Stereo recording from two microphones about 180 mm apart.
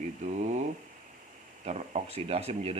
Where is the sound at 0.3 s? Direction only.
40° right (ahead or behind).